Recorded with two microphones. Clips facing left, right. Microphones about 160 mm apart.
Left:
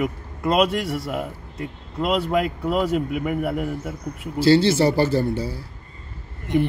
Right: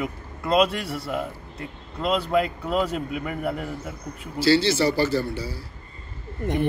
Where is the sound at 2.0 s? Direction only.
10° left (ahead or behind).